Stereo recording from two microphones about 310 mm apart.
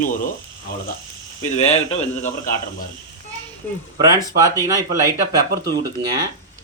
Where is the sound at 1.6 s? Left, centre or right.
Left.